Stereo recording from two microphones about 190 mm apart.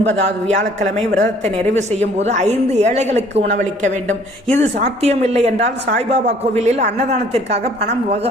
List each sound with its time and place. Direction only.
1.7 s a woman's voice: 35° right (ahead or behind)
4.4 s a woman's voice: 35° right (ahead or behind)